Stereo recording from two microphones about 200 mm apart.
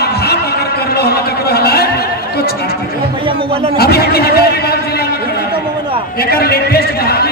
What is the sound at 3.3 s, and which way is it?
Speech, 30° right (ahead or behind).